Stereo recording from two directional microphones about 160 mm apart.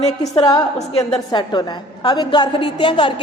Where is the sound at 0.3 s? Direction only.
25° left (ahead or behind).